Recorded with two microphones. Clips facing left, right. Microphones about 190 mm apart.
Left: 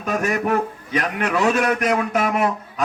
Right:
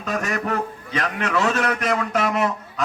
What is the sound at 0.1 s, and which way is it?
A man's voice, 15° left (ahead or behind).